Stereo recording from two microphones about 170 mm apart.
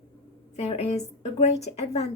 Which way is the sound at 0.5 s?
40° left (ahead or behind).